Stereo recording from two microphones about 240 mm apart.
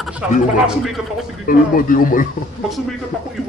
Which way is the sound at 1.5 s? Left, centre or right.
Left.